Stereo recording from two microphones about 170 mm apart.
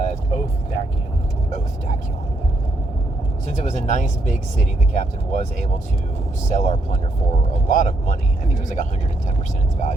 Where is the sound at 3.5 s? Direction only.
45° left (ahead or behind).